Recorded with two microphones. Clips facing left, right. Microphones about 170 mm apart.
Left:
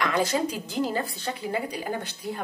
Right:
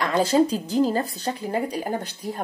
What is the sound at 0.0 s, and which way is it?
A woman's voice, 35° right (ahead or behind).